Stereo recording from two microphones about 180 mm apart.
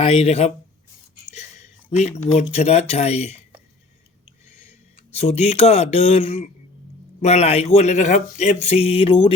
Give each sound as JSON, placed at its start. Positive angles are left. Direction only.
{"t": 0.0, "sound": "speech", "side_deg": 35}
{"t": 4.4, "sound": "a sound", "side_deg": 40}
{"t": 5.1, "sound": "speech", "side_deg": 40}